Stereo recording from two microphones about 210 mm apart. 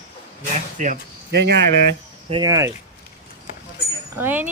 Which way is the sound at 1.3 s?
55° right (ahead or behind).